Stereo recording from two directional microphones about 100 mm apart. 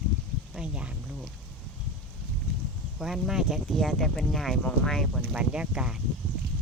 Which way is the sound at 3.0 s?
5° right (ahead or behind).